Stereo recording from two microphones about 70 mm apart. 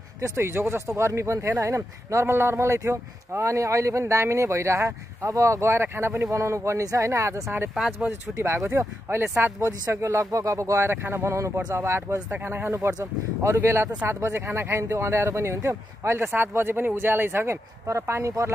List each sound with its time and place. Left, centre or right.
0.4 s speech: right
13.0 s speech: right